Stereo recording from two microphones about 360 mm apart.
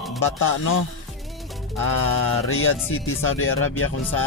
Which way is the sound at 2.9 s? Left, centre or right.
Left.